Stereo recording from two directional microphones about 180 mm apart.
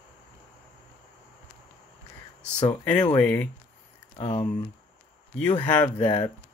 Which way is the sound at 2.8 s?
10° left (ahead or behind).